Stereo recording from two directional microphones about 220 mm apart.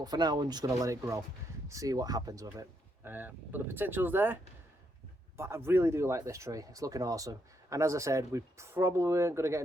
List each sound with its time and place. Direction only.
0.0 s speech: 20° right (ahead or behind)
5.4 s speech: 10° right (ahead or behind)